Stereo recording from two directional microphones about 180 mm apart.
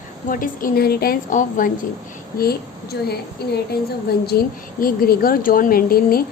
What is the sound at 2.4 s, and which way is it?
A woman's voice, 60° left (ahead or behind).